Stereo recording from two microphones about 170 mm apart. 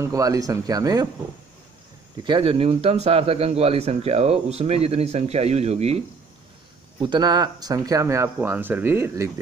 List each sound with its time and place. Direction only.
0.0 s speech: 20° right (ahead or behind)
2.2 s a man's voice: 30° right (ahead or behind)
7.0 s speech: 25° right (ahead or behind)